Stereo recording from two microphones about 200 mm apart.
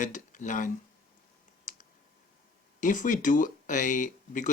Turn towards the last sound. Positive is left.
turn(degrees=40)  # may be behind; listen again after turning